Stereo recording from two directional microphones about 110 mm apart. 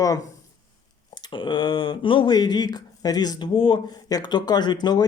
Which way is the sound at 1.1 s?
45° left (ahead or behind).